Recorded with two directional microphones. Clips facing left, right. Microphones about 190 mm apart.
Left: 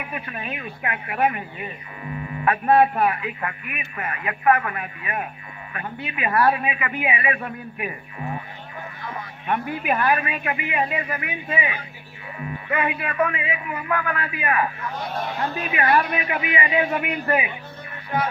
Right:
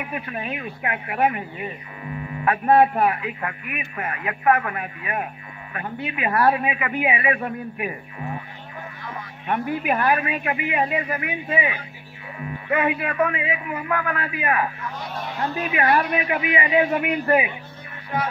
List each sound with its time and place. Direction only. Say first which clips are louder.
0.8 s a man's voice: right 1 dB; 35° right (ahead or behind)
2.4 s a man's voice: right 1 dB; 40° right (ahead or behind)
9.5 s a man's voice: right 1 dB; 40° right (ahead or behind)
15.8 s a man's voice: even; 40° right (ahead or behind)